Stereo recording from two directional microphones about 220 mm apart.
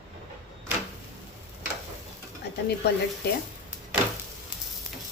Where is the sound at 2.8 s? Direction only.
45° left (ahead or behind).